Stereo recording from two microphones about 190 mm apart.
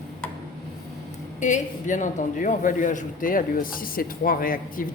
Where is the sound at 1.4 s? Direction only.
40° left (ahead or behind).